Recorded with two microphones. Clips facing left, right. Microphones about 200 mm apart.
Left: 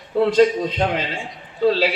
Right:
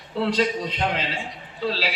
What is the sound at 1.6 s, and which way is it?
Speech, 50° left (ahead or behind).